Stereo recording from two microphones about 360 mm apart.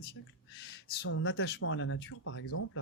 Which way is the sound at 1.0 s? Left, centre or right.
Left.